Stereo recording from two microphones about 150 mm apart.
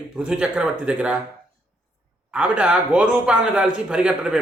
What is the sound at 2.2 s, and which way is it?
Speech, 10° right (ahead or behind).